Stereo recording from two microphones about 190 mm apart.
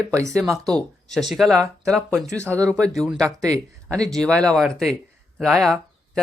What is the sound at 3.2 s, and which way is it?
Speech, 15° right (ahead or behind).